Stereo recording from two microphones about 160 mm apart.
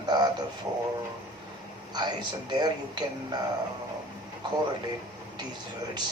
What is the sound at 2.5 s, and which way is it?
Speech, 25° right (ahead or behind).